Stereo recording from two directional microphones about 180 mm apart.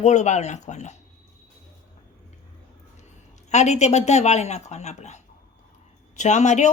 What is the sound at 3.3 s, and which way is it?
Speech, 40° left (ahead or behind).